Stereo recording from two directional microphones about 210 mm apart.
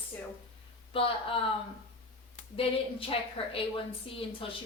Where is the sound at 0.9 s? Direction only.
25° left (ahead or behind).